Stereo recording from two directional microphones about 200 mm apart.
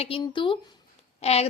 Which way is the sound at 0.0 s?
25° left (ahead or behind).